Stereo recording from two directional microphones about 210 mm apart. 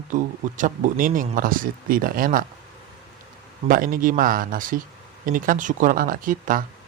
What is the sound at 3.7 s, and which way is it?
Speech, 40° right (ahead or behind).